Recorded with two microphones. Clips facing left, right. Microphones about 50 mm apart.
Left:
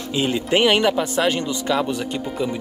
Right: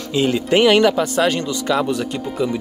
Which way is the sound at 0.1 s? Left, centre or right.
Centre.